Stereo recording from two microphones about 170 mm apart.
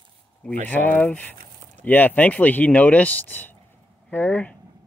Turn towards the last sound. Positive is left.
turn(degrees=10)  # may be behind; listen again after turning